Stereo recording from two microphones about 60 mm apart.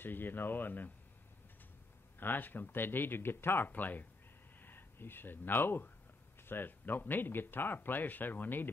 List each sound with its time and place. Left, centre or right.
0.0 s speech: left
2.1 s speech: left